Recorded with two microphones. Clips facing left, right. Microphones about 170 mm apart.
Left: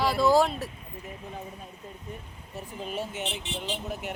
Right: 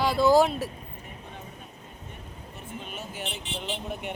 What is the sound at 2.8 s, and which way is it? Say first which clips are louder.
Speech: left 8 dB; 30° left (ahead or behind).